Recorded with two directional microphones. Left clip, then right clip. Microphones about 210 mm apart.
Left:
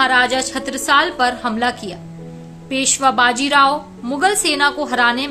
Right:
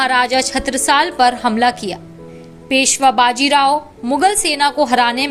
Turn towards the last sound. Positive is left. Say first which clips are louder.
# right 3 dB
turn(degrees=-20)  # may be behind; listen again after turning